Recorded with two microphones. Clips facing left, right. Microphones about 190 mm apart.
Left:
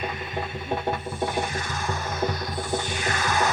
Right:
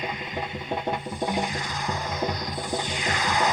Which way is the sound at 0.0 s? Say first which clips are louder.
Left 1 dB; 20° right (ahead or behind).